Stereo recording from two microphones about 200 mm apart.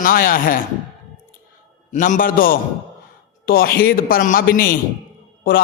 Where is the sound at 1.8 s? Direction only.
40° left (ahead or behind).